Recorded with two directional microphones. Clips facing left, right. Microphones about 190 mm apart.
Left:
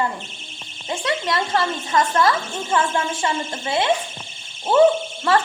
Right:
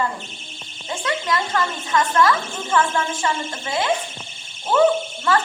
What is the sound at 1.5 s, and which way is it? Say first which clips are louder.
A woman's voice: left 3 dB; 35° left (ahead or behind).